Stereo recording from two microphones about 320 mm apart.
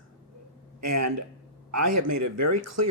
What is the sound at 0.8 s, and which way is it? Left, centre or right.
Speech, right.